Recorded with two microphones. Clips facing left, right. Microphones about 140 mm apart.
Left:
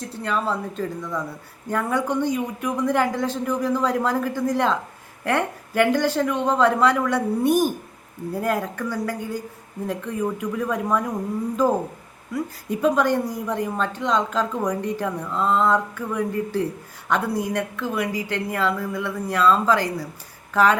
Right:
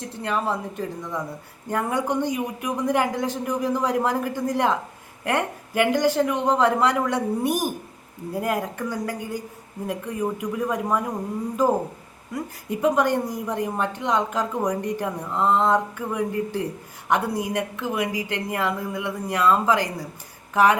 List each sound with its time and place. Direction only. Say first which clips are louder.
0.0 s a man's voice: left 1 dB; 20° right (ahead or behind)
12.3 s a man's voice: left 3 dB; 15° right (ahead or behind)